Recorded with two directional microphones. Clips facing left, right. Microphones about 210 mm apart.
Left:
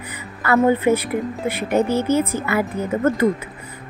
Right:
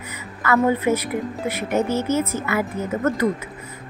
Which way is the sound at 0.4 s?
30° left (ahead or behind).